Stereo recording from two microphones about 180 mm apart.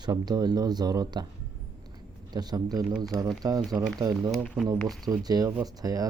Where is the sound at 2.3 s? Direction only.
20° right (ahead or behind).